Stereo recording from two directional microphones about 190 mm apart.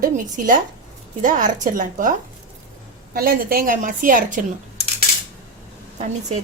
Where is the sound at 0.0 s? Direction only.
45° right (ahead or behind).